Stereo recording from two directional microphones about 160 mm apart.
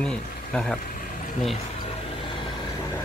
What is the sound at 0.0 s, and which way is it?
Speech, 5° left (ahead or behind).